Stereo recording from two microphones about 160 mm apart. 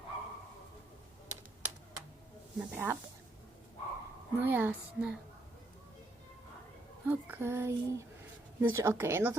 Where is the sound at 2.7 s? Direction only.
10° right (ahead or behind).